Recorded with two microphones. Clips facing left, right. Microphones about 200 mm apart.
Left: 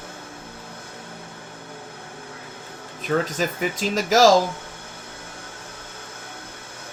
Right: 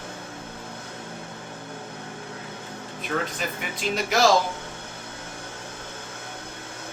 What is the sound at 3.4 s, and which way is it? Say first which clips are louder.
Speech: left 7 dB; 40° left (ahead or behind).